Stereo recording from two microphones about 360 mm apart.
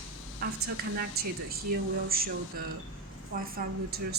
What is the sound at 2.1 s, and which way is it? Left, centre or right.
Speech, right.